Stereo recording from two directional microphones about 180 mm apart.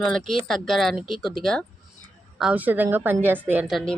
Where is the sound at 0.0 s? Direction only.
5° left (ahead or behind).